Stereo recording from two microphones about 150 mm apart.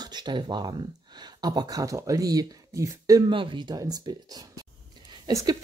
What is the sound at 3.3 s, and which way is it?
Speech, 35° right (ahead or behind).